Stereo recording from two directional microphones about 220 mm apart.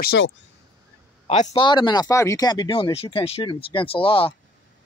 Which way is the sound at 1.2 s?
30° left (ahead or behind).